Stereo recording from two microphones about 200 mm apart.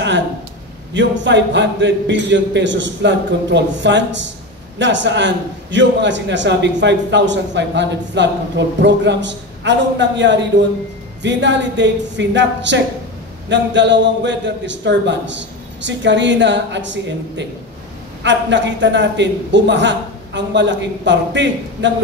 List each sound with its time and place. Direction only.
0.9 s a man's voice: 65° right (ahead or behind)